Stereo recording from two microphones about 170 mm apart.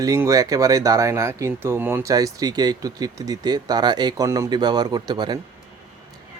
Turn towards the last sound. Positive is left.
turn(degrees=-25)  # may be behind; listen again after turning